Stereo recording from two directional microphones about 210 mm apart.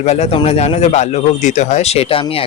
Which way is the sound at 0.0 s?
30° left (ahead or behind).